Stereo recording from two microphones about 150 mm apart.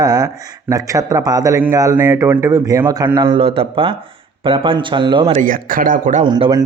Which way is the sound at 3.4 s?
40° right (ahead or behind).